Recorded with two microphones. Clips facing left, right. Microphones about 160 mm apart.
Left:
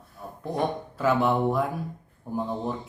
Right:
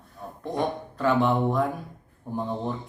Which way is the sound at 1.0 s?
5° left (ahead or behind).